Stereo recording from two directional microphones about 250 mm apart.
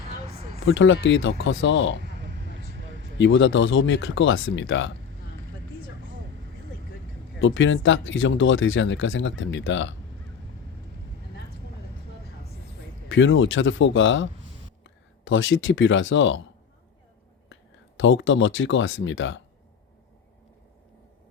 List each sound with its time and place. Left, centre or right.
0.2 s vehicle: right
0.6 s speech: left
2.0 s a sound: right
3.2 s speech: left
7.3 s speech: left
13.1 s speech: left
17.5 s speech: left